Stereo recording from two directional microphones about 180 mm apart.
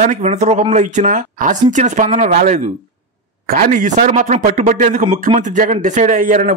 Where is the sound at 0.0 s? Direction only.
40° right (ahead or behind).